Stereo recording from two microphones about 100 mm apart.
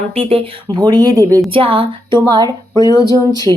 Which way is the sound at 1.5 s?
60° right (ahead or behind).